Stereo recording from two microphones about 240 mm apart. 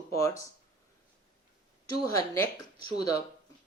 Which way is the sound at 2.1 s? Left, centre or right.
Centre.